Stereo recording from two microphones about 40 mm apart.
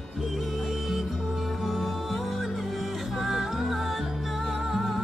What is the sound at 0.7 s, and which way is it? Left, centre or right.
Music, centre.